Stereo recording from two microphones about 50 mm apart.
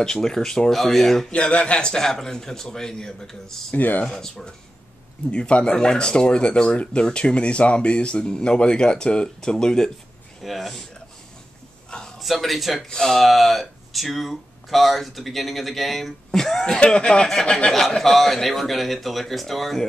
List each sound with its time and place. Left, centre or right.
0.0 s a man's voice: centre
1.3 s a man's voice: left; by 3.7 s centre
3.7 s speech: left
4.0 s a man's voice: centre
5.3 s speech: centre
10.4 s speech: centre
12.2 s a man's voice: centre